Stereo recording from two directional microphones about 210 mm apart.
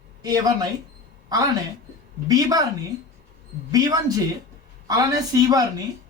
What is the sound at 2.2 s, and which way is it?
Speech, 20° right (ahead or behind).